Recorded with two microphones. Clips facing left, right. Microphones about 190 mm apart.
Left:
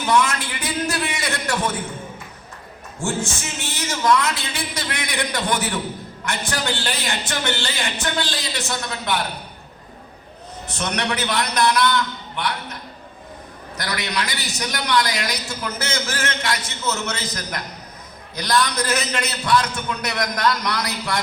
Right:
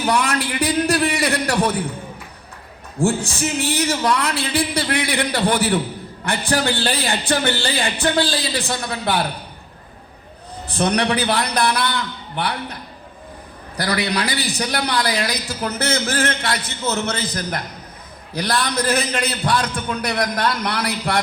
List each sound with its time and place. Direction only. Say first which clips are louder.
0.0 s a sound: even; 35° right (ahead or behind)
3.0 s a man's voice: right 6 dB; 35° right (ahead or behind)
10.7 s a man's voice: right 6 dB; 35° right (ahead or behind)
13.7 s a man's voice: right 5 dB; 35° right (ahead or behind)
16.4 s a man's voice: right 2 dB; 60° right (ahead or behind)
18.3 s a man's voice: even; 30° right (ahead or behind)